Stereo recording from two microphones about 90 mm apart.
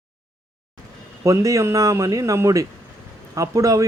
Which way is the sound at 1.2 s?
40° right (ahead or behind).